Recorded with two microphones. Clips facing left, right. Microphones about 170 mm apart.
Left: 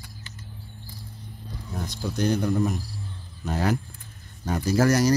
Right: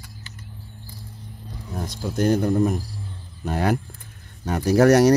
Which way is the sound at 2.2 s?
50° right (ahead or behind).